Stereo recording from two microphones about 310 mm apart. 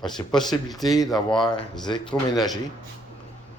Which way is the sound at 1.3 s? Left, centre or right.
Centre.